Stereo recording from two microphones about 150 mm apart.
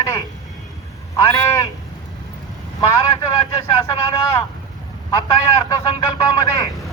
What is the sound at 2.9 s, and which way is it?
Vehicle, 20° left (ahead or behind).